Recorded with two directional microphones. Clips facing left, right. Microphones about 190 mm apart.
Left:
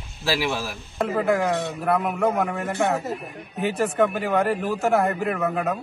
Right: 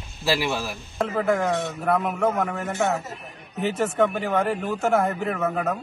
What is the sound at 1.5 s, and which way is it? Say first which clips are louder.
Speech: even; 20° left (ahead or behind).